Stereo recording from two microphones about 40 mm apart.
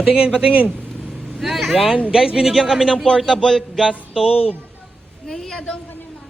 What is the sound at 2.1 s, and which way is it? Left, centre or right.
Speech, centre.